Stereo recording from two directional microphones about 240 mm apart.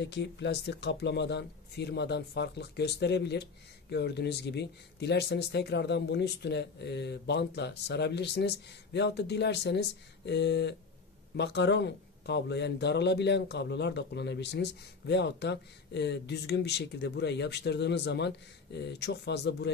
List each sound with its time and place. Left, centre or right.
0.0 s speech: left